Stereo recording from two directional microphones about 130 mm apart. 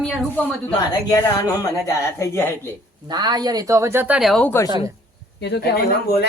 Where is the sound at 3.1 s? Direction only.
35° right (ahead or behind); by 4.2 s 15° right (ahead or behind).